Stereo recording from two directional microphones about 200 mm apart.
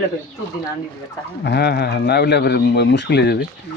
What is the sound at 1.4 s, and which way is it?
Speech, 55° left (ahead or behind).